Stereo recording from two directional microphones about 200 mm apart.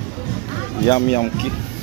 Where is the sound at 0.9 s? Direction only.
20° left (ahead or behind).